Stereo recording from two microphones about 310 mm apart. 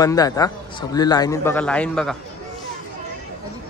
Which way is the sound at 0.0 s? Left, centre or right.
Centre.